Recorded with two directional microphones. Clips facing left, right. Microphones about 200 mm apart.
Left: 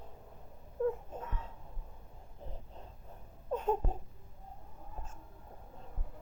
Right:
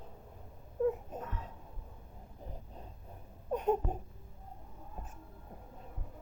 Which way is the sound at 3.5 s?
15° right (ahead or behind).